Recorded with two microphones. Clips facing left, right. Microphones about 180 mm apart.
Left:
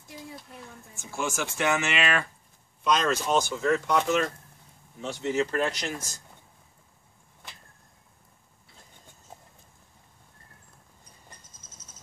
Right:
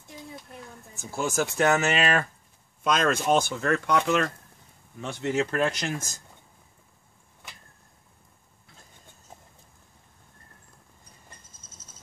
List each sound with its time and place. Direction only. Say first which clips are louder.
0.9 s speech: right 4 dB; 40° right (ahead or behind); by 6.0 s 55° right (ahead or behind)